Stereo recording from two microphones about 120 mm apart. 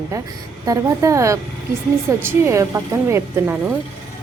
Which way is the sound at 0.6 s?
30° right (ahead or behind).